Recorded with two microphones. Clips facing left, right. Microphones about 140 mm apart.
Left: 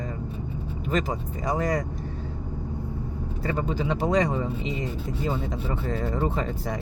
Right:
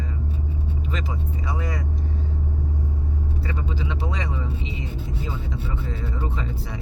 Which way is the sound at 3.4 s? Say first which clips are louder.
Left 7 dB; 45° left (ahead or behind).